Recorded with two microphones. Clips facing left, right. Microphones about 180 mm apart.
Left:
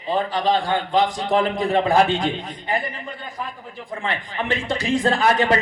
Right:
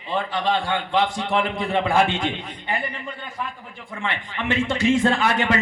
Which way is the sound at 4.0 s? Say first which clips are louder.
Left 1 dB; 35° left (ahead or behind).